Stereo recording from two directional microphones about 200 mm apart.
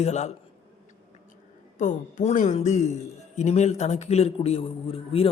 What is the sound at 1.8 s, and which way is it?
Speech, 40° left (ahead or behind).